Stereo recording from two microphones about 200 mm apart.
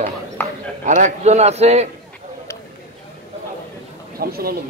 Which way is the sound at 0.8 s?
35° right (ahead or behind).